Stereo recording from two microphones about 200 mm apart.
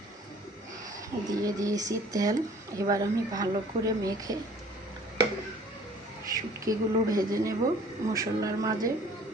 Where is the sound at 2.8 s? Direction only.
15° right (ahead or behind).